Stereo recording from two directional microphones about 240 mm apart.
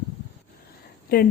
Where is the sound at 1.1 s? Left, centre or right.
Left.